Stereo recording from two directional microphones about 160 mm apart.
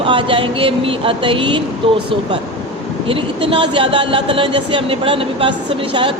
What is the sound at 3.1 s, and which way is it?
Speech, 35° right (ahead or behind).